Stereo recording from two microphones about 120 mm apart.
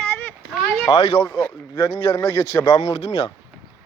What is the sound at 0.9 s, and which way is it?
Speech, 60° left (ahead or behind).